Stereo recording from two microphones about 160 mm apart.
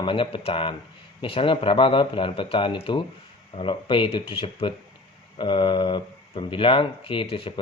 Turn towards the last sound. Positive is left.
turn(degrees=35)  # may be behind; listen again after turning